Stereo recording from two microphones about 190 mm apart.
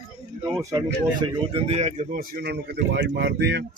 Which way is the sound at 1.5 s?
35° right (ahead or behind).